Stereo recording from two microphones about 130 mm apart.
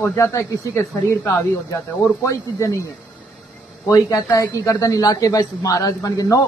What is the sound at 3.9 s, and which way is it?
A man's voice, 30° left (ahead or behind).